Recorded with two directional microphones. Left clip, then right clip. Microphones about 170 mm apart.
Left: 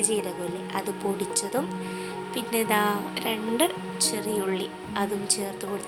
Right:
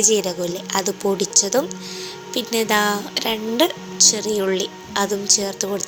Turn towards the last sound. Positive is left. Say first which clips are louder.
# right 9 dB
turn(degrees=-25)  # may be behind; listen again after turning